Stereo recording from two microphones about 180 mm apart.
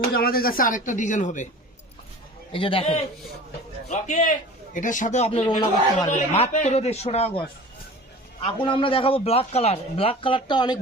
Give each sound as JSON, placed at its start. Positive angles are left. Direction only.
{"t": 0.1, "sound": "a man's voice", "side_deg": 55}
{"t": 2.5, "sound": "a man's voice", "side_deg": 30}
{"t": 3.8, "sound": "a man's voice", "side_deg": 40}
{"t": 8.4, "sound": "a man's voice", "side_deg": 30}